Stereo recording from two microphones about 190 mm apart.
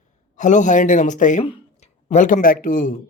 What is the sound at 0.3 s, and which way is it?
A man's voice, 40° left (ahead or behind).